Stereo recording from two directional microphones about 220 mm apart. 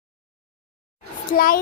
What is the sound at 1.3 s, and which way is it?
Speech, 40° left (ahead or behind).